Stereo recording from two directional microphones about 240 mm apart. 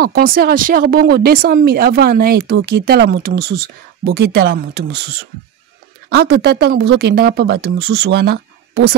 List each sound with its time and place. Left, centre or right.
0.0 s speech: right